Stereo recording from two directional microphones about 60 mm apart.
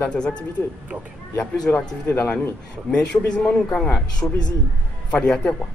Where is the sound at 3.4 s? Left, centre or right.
Centre.